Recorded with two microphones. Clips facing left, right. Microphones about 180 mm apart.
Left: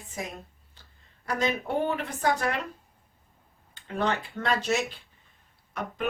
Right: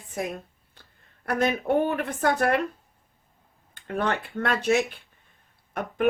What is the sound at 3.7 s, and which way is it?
Speech, 55° right (ahead or behind).